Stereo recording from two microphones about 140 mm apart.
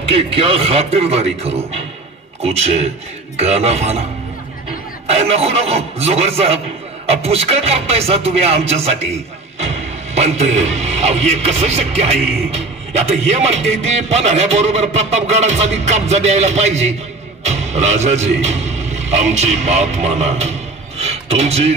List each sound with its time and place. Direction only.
0.1 s speech: 40° right (ahead or behind)
5.0 s speech: 45° right (ahead or behind)
10.1 s speech: 50° right (ahead or behind)
21.0 s a sound: 50° right (ahead or behind)